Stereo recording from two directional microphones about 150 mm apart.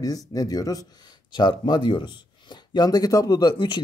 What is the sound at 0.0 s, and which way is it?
Speech, 25° left (ahead or behind).